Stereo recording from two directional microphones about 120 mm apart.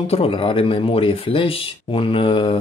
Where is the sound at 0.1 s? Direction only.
50° left (ahead or behind).